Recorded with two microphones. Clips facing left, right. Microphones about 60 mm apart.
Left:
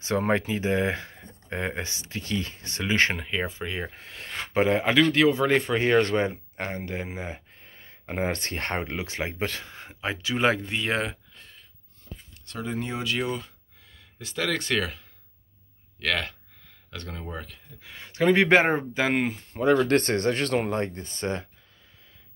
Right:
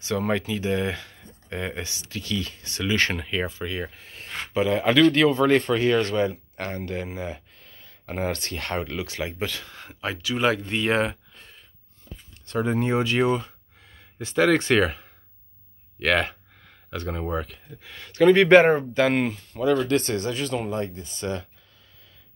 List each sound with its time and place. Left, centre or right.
0.0 s speech: left
3.2 s speech: centre
3.9 s speech: left
4.6 s speech: left
4.8 s speech: centre
5.8 s speech: left
6.6 s speech: centre; by 9.7 s left
9.7 s speech: centre
10.7 s speech: centre
12.4 s speech: right
16.9 s speech: centre
17.8 s speech: centre
19.6 s speech: left